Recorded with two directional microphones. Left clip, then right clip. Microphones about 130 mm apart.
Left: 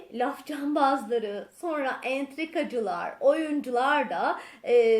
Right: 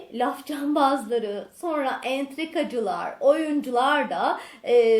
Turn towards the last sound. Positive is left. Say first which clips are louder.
# right 2 dB
turn(degrees=20)  # may be behind; listen again after turning